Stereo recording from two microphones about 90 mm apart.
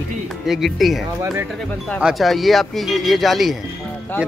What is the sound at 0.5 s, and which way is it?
Speech, centre (ahead or behind).